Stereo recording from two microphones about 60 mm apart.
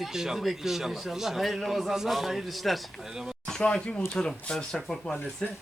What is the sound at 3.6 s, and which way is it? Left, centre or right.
Speech, centre.